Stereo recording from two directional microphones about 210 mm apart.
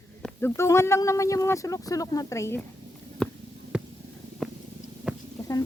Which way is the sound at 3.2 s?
5° left (ahead or behind).